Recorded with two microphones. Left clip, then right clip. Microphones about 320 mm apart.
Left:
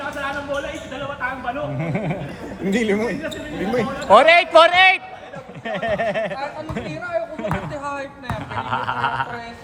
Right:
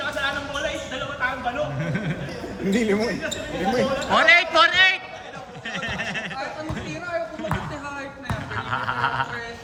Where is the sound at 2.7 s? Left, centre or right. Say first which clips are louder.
Left 2 dB; centre.